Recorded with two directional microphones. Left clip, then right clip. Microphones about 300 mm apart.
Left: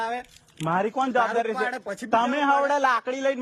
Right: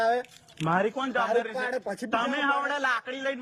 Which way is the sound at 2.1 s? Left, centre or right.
Centre.